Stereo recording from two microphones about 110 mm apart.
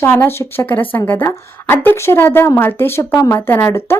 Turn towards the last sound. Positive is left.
turn(degrees=25)  # may be behind; listen again after turning